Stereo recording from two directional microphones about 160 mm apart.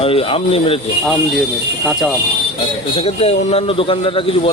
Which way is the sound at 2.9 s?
40° left (ahead or behind).